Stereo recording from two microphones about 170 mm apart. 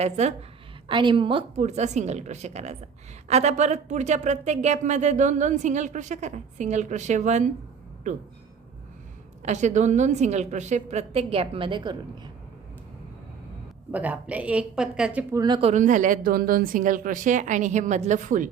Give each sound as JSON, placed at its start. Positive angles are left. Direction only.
{"t": 0.0, "sound": "a woman's voice", "side_deg": -40}
{"t": 0.9, "sound": "a woman's voice", "side_deg": -30}
{"t": 9.4, "sound": "speech", "side_deg": -45}
{"t": 13.9, "sound": "a woman's voice", "side_deg": -10}
{"t": 15.4, "sound": "speech", "side_deg": -25}
{"t": 15.7, "sound": "speech", "side_deg": -50}